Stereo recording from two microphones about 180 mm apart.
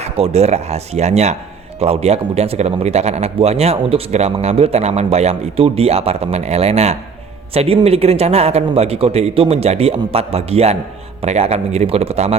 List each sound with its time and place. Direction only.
0.0 s a man's voice: 35° right (ahead or behind)